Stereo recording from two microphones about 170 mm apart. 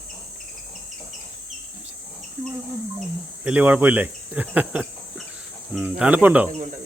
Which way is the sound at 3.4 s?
10° right (ahead or behind).